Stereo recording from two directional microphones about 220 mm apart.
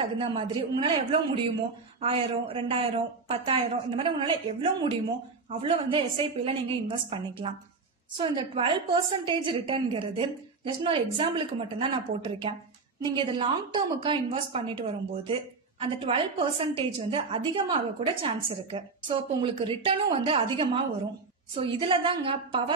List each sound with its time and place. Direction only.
0.0 s a woman's voice: 20° right (ahead or behind)
5.6 s a woman's voice: 25° right (ahead or behind)